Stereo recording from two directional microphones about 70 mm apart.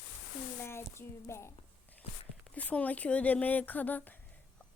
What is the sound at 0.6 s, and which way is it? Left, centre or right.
Speech, left.